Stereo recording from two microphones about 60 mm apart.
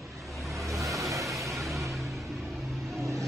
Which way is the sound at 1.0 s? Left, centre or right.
Right.